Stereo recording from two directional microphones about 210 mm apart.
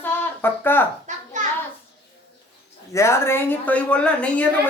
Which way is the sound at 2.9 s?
15° left (ahead or behind).